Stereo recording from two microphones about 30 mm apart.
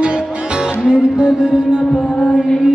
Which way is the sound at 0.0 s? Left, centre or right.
Right.